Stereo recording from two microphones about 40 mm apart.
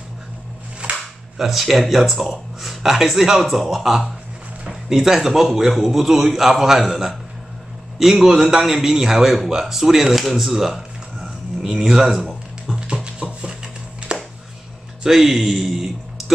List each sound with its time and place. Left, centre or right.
1.4 s a man's voice: centre
4.6 s a man's voice: centre
11.7 s a man's voice: centre
12.6 s a sound: centre
15.0 s a man's voice: centre